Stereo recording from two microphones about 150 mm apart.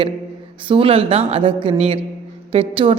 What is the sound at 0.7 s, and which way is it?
A woman's voice, 40° right (ahead or behind).